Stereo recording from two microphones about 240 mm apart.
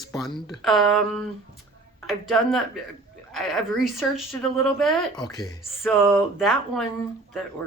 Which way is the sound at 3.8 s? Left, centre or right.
Centre.